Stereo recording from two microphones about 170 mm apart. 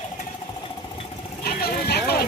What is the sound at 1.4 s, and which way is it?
Vehicle, 70° left (ahead or behind).